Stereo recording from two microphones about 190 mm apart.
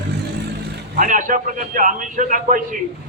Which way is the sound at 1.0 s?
45° right (ahead or behind).